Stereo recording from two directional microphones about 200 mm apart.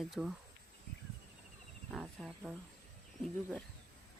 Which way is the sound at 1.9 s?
Centre (ahead or behind).